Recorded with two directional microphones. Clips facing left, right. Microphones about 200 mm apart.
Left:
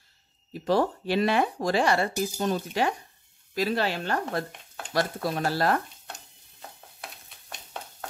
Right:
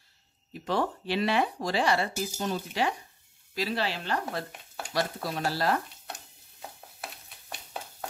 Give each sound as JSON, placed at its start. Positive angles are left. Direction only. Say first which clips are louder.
{"t": 0.5, "sound": "speech", "louder": "left 5 dB", "side_deg": 35}
{"t": 4.5, "sound": "stir", "louder": "right 1 dB", "side_deg": -5}
{"t": 4.9, "sound": "speech", "louder": "left 4 dB", "side_deg": 50}
{"t": 7.0, "sound": "a sound", "louder": "right 2 dB", "side_deg": -5}